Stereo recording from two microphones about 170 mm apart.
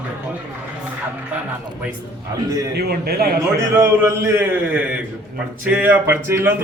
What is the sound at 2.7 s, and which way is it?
Speech, 65° right (ahead or behind).